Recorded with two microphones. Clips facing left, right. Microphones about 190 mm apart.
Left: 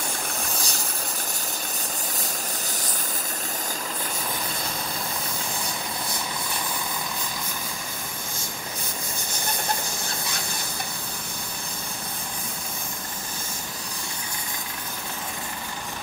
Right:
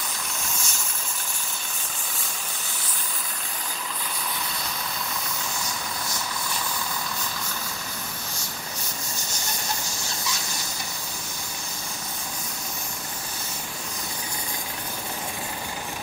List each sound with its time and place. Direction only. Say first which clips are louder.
0.5 s vehicle: left 3 dB; 35° left (ahead or behind)
9.3 s hiss: left 4 dB; 55° left (ahead or behind)